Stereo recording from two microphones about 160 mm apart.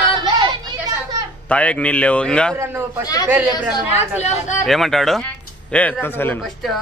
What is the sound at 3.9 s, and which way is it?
Speech, 45° left (ahead or behind).